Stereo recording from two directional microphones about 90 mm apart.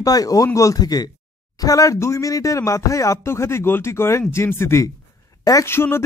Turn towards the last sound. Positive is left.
turn(degrees=25)  # may be behind; listen again after turning